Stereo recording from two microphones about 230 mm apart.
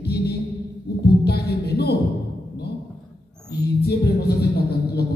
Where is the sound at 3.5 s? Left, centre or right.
Left.